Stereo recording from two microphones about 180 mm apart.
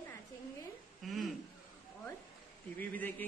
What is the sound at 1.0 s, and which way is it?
Chuckle, centre (ahead or behind).